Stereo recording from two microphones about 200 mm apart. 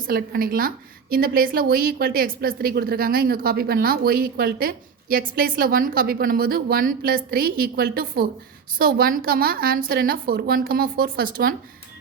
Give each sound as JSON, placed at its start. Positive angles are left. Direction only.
{"t": 0.1, "sound": "a woman's voice", "side_deg": -45}